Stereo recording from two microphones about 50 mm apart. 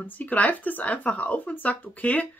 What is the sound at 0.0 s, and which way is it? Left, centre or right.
A woman's voice, left.